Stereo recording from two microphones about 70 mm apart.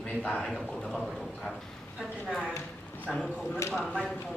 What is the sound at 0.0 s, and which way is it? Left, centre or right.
A man's voice, left.